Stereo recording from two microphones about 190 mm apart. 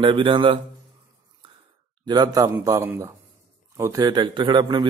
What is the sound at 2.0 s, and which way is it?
A man's voice, 20° right (ahead or behind).